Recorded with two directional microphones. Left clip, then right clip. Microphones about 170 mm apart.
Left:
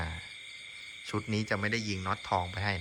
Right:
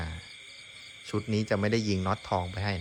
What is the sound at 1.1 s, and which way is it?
Speech, 10° right (ahead or behind).